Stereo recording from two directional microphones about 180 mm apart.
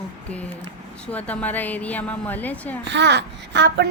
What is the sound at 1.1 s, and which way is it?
A woman's voice, 10° left (ahead or behind).